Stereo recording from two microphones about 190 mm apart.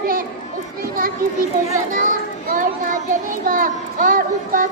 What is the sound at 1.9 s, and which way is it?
Children playing, 45° right (ahead or behind).